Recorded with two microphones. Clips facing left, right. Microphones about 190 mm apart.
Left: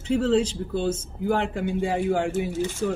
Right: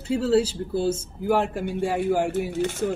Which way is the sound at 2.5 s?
60° right (ahead or behind).